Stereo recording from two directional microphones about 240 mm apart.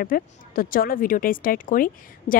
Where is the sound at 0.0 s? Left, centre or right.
Left.